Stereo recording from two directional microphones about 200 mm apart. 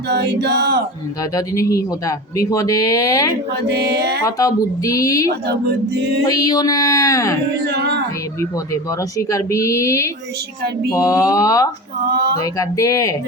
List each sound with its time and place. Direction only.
0.1 s male singing: 55° right (ahead or behind)
1.2 s speech: 15° left (ahead or behind)
3.5 s music: 55° right (ahead or behind)
4.2 s speech: 15° left (ahead or behind)
7.7 s music: 55° right (ahead or behind)
8.4 s speech: 15° left (ahead or behind)